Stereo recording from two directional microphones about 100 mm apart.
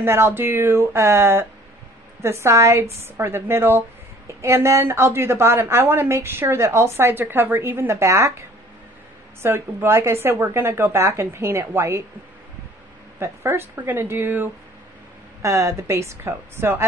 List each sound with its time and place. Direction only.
0.0 s a woman's voice: 25° right (ahead or behind)
13.2 s a woman's voice: 25° right (ahead or behind)